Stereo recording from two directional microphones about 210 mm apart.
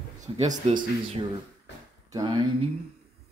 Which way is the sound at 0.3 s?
25° right (ahead or behind).